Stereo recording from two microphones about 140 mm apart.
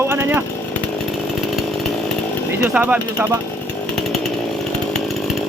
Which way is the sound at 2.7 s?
10° right (ahead or behind).